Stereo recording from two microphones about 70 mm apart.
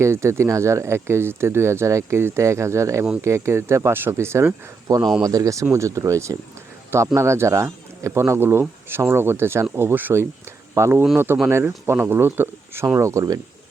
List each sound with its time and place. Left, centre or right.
0.0 s speech: right
5.2 s speech: right
10.8 s speech: right
13.0 s speech: right